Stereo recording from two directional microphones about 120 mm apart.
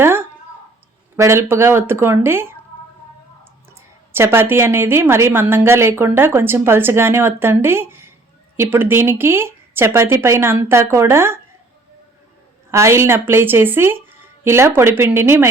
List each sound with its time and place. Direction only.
0.0 s a sound: 20° right (ahead or behind)
1.1 s a woman's voice: 20° right (ahead or behind)
3.8 s a woman's voice: 20° right (ahead or behind)
12.7 s a woman's voice: 25° right (ahead or behind)